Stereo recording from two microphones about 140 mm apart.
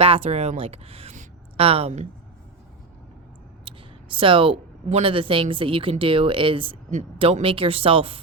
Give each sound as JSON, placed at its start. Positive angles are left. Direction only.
{"t": 0.0, "sound": "speech", "side_deg": -45}
{"t": 3.7, "sound": "a woman's voice", "side_deg": -40}